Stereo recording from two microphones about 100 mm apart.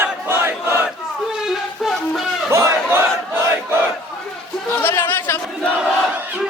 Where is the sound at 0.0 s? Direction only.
25° right (ahead or behind).